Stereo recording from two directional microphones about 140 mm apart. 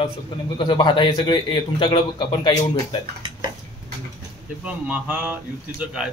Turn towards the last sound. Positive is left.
turn(degrees=-5)  # may be behind; listen again after turning